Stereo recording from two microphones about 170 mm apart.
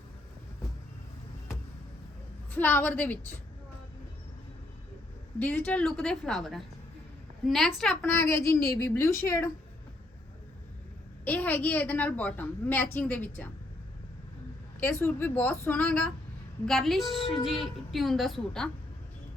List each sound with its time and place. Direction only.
2.5 s a woman's voice: 10° left (ahead or behind)
5.4 s a woman's voice: 10° left (ahead or behind)
8.1 s a woman's voice: 15° left (ahead or behind)
11.3 s a woman's voice: 10° left (ahead or behind)
14.8 s a woman's voice: 15° left (ahead or behind)